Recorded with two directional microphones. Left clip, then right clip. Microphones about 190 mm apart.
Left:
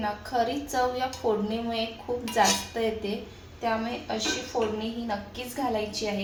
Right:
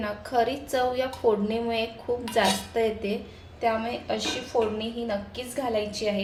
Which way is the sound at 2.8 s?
40° right (ahead or behind).